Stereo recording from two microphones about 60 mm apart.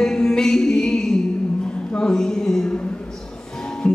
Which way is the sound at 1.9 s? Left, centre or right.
Centre.